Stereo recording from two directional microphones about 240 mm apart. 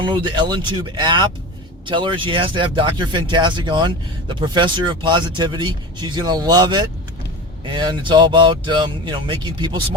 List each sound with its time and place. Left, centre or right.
0.0 s speech: centre